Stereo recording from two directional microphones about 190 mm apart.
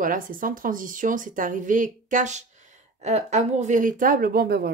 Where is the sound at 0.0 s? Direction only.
45° right (ahead or behind).